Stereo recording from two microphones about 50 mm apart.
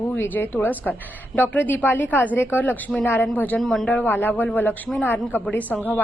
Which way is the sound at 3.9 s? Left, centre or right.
Left.